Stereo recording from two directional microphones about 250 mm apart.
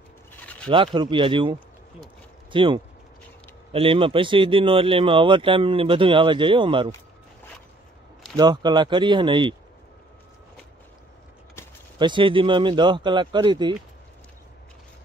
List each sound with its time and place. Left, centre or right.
0.3 s a sound: centre
0.7 s speech: centre
8.4 s speech: centre
12.0 s speech: centre